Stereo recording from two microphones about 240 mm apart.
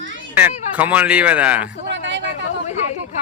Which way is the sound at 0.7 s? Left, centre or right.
Centre.